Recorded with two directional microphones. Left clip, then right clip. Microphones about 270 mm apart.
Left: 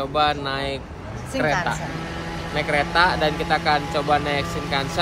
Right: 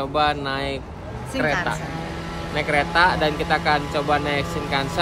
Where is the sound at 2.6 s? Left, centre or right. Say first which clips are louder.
Right 1 dB; centre.